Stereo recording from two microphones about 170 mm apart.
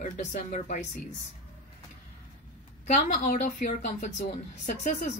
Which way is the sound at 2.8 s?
45° left (ahead or behind).